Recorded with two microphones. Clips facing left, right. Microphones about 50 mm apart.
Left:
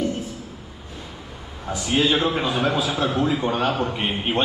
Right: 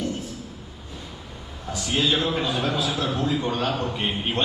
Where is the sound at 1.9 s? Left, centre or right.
Centre.